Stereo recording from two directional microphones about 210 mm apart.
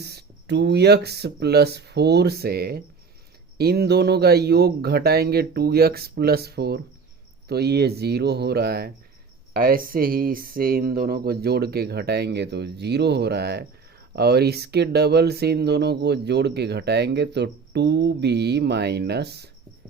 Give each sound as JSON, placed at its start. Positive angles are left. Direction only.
{"t": 0.0, "sound": "speech", "side_deg": -50}